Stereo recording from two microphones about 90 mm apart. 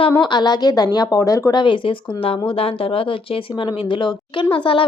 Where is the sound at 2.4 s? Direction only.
90° left.